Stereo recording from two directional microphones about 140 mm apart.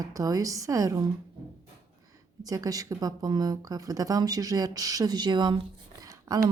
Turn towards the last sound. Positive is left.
turn(degrees=-25)  # may be behind; listen again after turning